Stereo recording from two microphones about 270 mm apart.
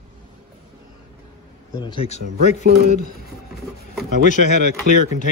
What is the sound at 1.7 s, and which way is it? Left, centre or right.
Speech, centre.